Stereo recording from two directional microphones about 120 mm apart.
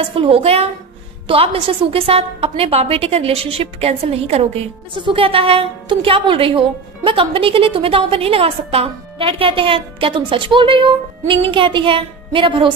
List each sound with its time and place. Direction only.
0.1 s a woman's voice: 50° right (ahead or behind)
4.9 s a woman's voice: 45° right (ahead or behind)